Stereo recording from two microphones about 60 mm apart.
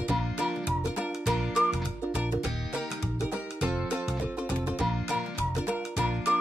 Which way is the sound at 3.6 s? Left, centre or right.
Centre.